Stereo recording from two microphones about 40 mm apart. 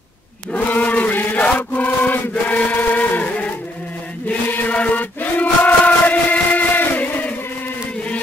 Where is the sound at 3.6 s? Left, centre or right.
Left.